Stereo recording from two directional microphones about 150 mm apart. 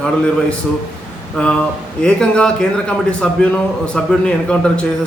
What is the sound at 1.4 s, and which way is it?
A man's voice, 5° left (ahead or behind).